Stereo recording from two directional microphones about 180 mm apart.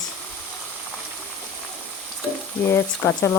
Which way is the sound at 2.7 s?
15° left (ahead or behind).